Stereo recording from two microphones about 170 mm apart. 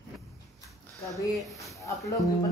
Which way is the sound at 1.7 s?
20° left (ahead or behind).